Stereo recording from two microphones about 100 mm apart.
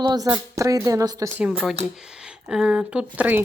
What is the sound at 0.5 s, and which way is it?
Speech, 35° right (ahead or behind).